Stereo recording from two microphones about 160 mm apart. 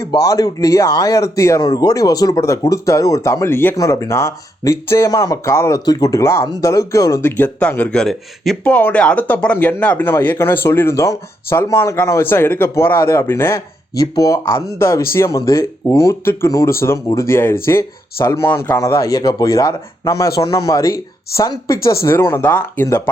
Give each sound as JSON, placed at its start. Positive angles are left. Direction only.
{"t": 0.0, "sound": "speech", "side_deg": 20}